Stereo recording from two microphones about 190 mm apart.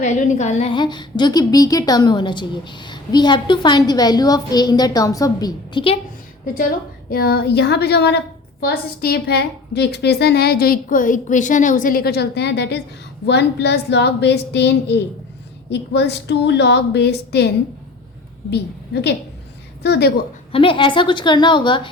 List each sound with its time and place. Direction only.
0.0 s a woman's voice: 40° left (ahead or behind)
7.1 s a woman's voice: 50° left (ahead or behind)
19.8 s a woman's voice: 60° left (ahead or behind)
20.5 s a woman's voice: 30° left (ahead or behind)